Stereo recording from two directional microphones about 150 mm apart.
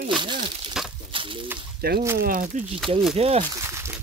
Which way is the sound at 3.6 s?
20° right (ahead or behind).